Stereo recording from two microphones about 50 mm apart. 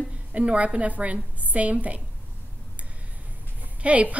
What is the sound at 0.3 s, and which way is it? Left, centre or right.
A woman's voice, right.